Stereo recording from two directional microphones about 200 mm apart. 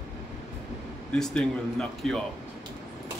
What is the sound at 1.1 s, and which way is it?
Speech, 5° left (ahead or behind).